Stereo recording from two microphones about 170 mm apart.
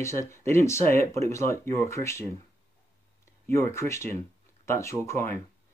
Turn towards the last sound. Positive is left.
turn(degrees=15)  # may be behind; listen again after turning